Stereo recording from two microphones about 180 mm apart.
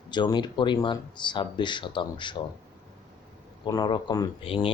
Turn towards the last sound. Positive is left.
turn(degrees=30)  # may be behind; listen again after turning